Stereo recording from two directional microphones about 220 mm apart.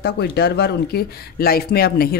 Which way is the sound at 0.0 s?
50° left (ahead or behind).